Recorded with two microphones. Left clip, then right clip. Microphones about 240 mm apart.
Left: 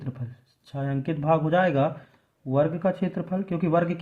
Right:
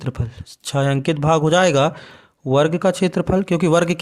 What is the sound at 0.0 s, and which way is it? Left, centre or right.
A man's voice, right.